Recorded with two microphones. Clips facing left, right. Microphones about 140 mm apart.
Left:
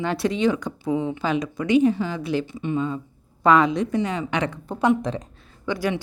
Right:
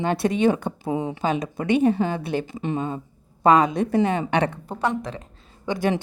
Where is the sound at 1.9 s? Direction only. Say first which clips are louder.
Right 1 dB; 55° right (ahead or behind).